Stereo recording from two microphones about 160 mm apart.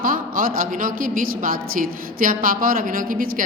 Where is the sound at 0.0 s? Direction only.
60° right (ahead or behind).